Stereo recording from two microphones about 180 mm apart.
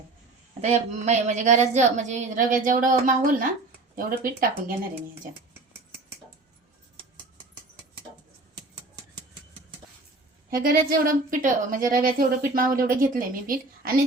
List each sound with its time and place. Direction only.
0.6 s a woman's voice: 40° right (ahead or behind)
10.5 s speech: 50° right (ahead or behind)